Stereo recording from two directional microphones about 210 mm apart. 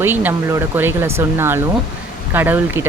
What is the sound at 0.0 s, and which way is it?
Speech, 10° right (ahead or behind).